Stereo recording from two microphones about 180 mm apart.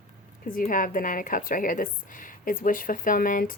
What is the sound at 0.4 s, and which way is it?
Speech, 50° left (ahead or behind).